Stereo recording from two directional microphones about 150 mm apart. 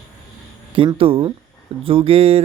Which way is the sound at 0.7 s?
35° right (ahead or behind).